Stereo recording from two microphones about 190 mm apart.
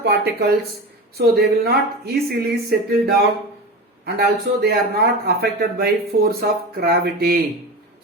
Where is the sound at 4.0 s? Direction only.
55° right (ahead or behind).